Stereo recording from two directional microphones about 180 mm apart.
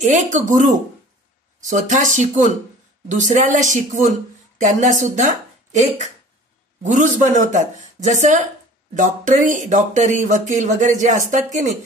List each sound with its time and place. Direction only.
0.0 s speech: 45° right (ahead or behind)